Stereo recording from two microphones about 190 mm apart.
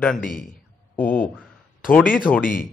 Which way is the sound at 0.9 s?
10° left (ahead or behind).